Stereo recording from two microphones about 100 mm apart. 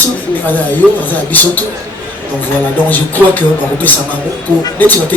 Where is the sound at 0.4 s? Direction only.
20° left (ahead or behind).